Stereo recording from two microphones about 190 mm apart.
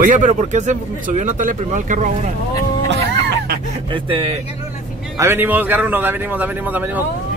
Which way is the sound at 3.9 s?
25° right (ahead or behind).